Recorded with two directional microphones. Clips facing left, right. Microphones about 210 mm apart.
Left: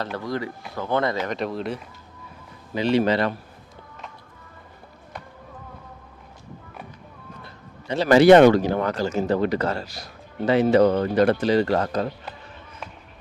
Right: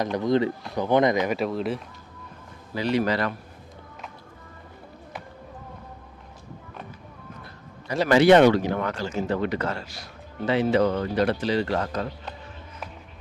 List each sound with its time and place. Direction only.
0.0 s speech: 20° right (ahead or behind); by 1.8 s centre (ahead or behind)
2.7 s a man's voice: 25° left (ahead or behind)
8.0 s speech: 40° left (ahead or behind)